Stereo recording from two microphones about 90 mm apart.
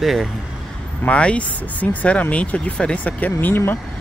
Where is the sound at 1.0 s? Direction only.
15° left (ahead or behind).